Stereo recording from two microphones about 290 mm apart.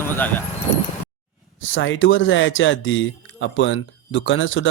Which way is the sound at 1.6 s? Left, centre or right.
Left.